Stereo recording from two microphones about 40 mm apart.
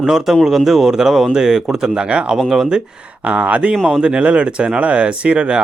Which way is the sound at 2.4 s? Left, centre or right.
Centre.